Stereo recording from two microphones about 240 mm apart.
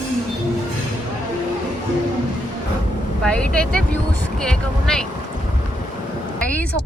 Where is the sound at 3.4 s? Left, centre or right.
Centre.